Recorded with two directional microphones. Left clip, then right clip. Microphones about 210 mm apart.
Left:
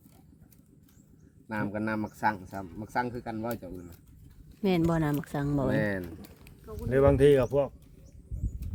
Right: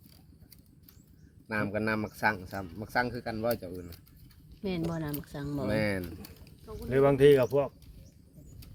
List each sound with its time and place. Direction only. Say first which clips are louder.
1.5 s speech: right 2 dB; 15° right (ahead or behind)
4.6 s speech: left 7 dB; 50° left (ahead or behind)
5.7 s speech: left 1 dB; 20° right (ahead or behind)
6.8 s speech: even; 35° left (ahead or behind)